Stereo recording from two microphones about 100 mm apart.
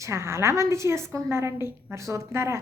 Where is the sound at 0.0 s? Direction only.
30° right (ahead or behind).